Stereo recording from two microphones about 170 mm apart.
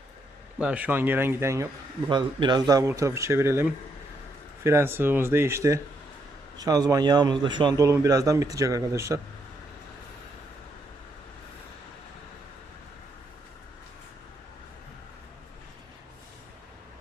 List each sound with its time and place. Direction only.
0.6 s speech: 10° right (ahead or behind)
2.0 s a man's voice: 25° right (ahead or behind)